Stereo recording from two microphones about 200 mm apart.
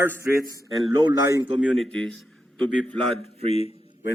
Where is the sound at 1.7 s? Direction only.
Centre (ahead or behind).